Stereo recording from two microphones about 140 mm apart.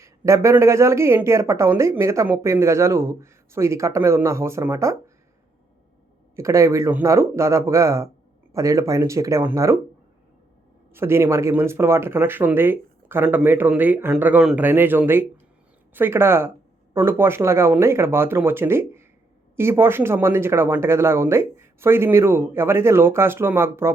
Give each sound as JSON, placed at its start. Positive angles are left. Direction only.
{"t": 0.0, "sound": "a woman's voice", "side_deg": -20}
{"t": 6.3, "sound": "a woman's voice", "side_deg": -20}
{"t": 10.9, "sound": "speech", "side_deg": -20}